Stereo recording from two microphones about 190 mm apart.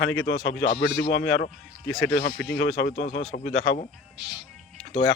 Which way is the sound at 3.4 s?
85° left.